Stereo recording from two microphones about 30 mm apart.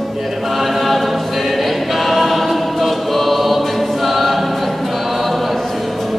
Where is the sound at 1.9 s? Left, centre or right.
Centre.